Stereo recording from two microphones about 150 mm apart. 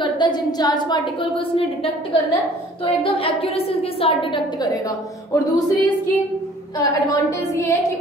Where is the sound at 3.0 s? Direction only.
35° left (ahead or behind).